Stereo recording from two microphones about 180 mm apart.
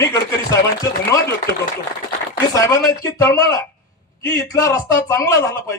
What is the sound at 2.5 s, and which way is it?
A man's voice, 15° left (ahead or behind).